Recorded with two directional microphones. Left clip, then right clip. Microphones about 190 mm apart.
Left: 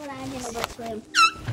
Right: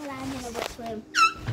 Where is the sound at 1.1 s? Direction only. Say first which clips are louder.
Left 2 dB; 5° right (ahead or behind).